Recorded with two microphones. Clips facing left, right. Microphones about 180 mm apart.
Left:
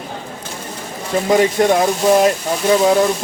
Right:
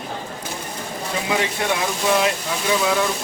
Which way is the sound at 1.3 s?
40° left (ahead or behind).